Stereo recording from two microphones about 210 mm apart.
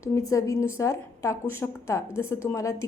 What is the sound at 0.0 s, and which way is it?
A woman's voice, 15° left (ahead or behind).